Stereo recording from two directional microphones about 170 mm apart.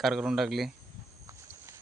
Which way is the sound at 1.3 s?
15° right (ahead or behind).